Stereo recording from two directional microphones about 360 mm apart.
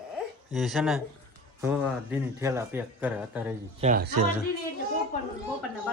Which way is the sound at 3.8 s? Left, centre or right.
Right.